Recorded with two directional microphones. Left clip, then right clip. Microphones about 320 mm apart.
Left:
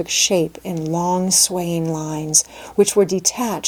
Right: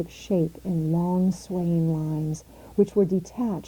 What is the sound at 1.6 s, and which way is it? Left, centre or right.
Speech, left.